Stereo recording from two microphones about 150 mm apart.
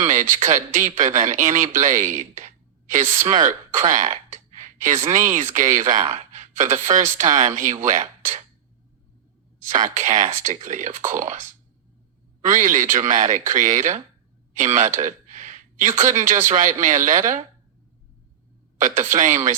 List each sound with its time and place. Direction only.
0.0 s speech: 55° right (ahead or behind)
3.4 s a sound: 55° right (ahead or behind)
5.0 s speech: 60° right (ahead or behind)
9.6 s speech: 55° right (ahead or behind)
18.8 s speech: 55° right (ahead or behind)